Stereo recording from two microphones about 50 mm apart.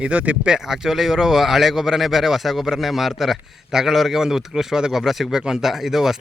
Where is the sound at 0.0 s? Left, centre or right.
Right.